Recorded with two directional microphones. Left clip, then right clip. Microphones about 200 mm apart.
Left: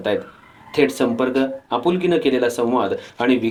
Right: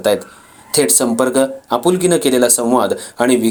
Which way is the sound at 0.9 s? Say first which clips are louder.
Right 5 dB; 45° right (ahead or behind).